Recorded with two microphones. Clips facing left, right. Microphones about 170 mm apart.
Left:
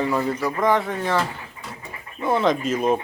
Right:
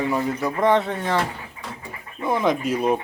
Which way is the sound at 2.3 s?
15° right (ahead or behind).